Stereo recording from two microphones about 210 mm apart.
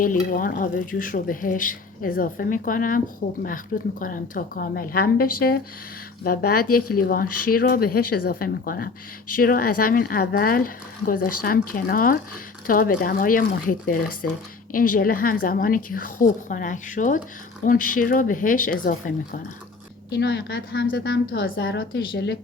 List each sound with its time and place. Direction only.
0.3 s a woman's voice: 40° left (ahead or behind)
20.1 s a woman's voice: 50° left (ahead or behind)